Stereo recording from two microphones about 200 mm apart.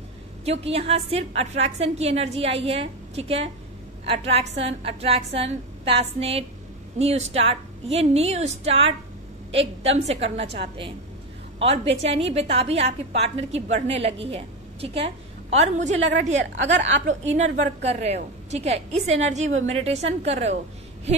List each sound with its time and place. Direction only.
0.5 s a woman's voice: 30° right (ahead or behind)
11.6 s a woman's voice: 30° right (ahead or behind)
16.5 s a woman's voice: 65° right (ahead or behind)
17.1 s a woman's voice: 35° right (ahead or behind)